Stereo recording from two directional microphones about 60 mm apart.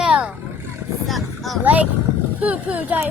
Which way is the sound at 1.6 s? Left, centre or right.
Right.